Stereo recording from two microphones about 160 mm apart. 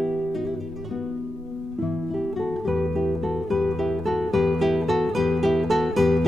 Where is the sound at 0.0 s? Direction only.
Centre (ahead or behind).